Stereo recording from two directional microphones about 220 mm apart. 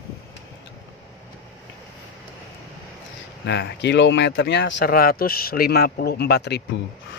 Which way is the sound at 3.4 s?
50° left (ahead or behind).